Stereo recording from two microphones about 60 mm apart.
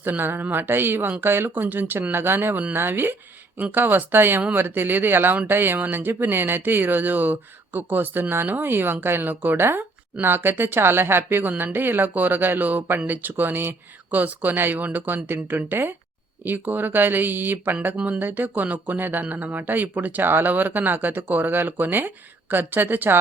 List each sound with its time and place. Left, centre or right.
0.0 s speech: right